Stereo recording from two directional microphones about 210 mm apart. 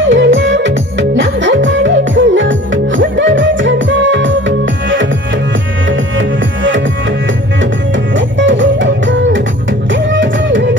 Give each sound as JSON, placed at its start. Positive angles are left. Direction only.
{"t": 0.1, "sound": "music", "side_deg": -65}
{"t": 7.9, "sound": "music", "side_deg": -65}